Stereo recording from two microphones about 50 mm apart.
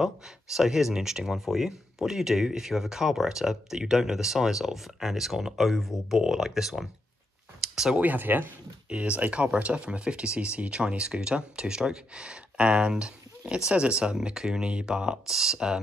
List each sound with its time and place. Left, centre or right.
0.0 s speech: centre
7.6 s a sound: centre
8.0 s speech: right
8.8 s speech: right